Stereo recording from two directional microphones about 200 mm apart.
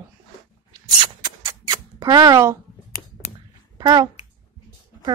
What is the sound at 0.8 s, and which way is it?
Rodents, 25° right (ahead or behind).